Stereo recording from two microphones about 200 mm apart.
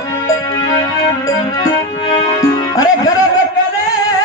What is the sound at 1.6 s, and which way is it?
Music, 20° left (ahead or behind).